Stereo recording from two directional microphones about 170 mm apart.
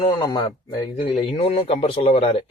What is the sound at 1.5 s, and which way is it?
Speech, 35° left (ahead or behind).